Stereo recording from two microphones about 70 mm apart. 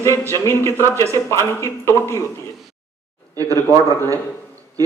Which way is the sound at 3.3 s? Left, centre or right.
Right.